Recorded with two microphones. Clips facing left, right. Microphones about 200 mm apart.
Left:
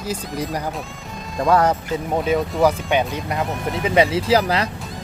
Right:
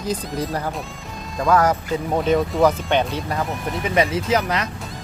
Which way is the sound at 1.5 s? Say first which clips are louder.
Left 1 dB; 30° left (ahead or behind).